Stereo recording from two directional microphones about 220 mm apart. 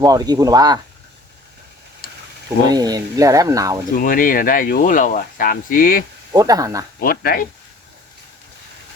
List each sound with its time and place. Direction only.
0.0 s speech: 15° right (ahead or behind)
2.6 s speech: 20° right (ahead or behind)
3.9 s speech: 40° left (ahead or behind)
6.3 s speech: 15° right (ahead or behind)
7.0 s speech: 45° left (ahead or behind)